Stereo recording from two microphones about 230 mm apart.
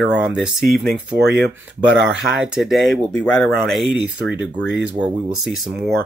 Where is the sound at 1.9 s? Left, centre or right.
Right.